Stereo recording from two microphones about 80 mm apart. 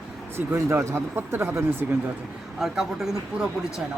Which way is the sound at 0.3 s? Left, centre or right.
Right.